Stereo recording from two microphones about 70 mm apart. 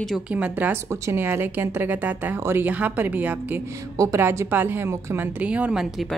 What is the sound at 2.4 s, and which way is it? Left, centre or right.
Speech, right.